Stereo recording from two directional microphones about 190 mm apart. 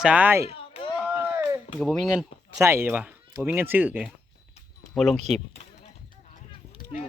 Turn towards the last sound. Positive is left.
turn(degrees=40)  # may be behind; listen again after turning